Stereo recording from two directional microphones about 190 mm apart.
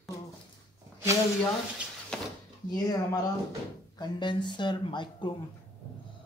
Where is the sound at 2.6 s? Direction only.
20° left (ahead or behind).